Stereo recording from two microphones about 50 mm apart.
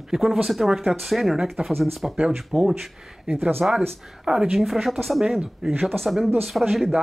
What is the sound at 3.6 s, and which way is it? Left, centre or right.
Speech, centre.